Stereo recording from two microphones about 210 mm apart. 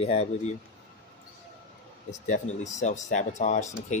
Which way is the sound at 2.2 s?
35° left (ahead or behind).